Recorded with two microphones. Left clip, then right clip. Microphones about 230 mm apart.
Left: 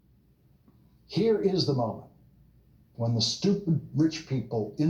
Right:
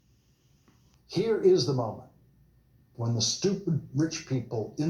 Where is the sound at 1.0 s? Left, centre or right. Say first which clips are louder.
Right 1 dB; right.